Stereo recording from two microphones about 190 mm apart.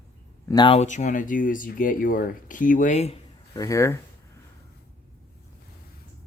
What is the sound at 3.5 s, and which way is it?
Speech, 15° left (ahead or behind).